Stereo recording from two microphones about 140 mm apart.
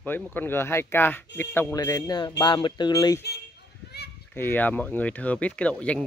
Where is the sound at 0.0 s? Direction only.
15° left (ahead or behind).